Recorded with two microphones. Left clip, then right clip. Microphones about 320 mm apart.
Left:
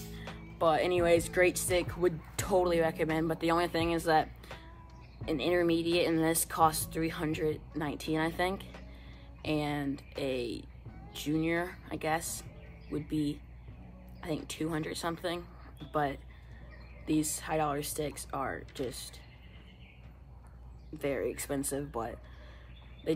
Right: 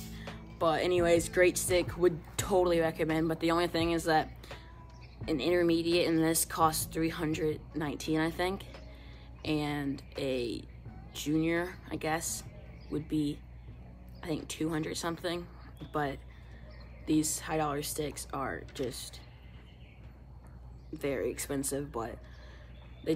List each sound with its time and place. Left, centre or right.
0.1 s speech: centre
21.0 s speech: centre